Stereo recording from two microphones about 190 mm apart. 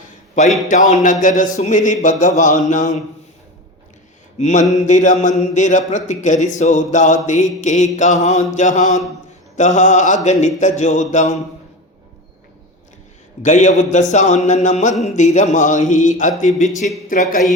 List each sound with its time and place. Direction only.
0.4 s speech: 40° left (ahead or behind)
4.4 s mantra: 35° left (ahead or behind)
4.9 s speech: 40° left (ahead or behind)
13.4 s speech: 40° left (ahead or behind)